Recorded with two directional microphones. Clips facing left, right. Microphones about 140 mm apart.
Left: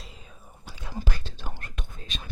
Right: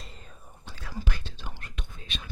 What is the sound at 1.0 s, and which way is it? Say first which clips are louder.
Whispering: left 2 dB; 40° left (ahead or behind).